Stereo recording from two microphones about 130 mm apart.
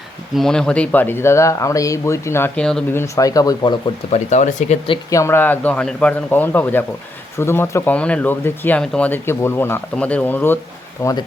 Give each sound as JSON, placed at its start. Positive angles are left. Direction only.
{"t": 0.3, "sound": "speech", "side_deg": 5}
{"t": 2.6, "sound": "speech", "side_deg": 5}
{"t": 2.9, "sound": "speech", "side_deg": 20}
{"t": 4.1, "sound": "speech", "side_deg": 65}
{"t": 5.1, "sound": "a man's voice", "side_deg": 20}